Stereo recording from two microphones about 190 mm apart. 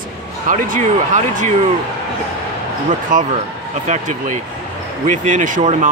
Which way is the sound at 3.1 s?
45° right (ahead or behind).